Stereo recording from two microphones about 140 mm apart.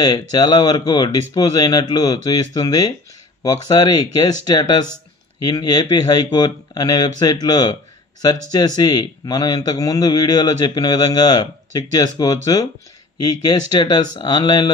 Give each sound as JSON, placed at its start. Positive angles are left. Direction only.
{"t": 0.0, "sound": "a man's voice", "side_deg": 30}